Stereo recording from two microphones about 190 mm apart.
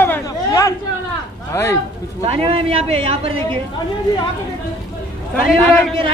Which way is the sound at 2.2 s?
30° right (ahead or behind).